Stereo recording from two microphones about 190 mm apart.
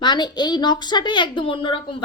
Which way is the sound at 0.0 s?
25° left (ahead or behind).